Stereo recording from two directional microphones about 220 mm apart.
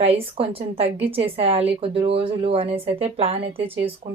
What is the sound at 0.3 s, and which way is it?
A woman's voice, 25° right (ahead or behind).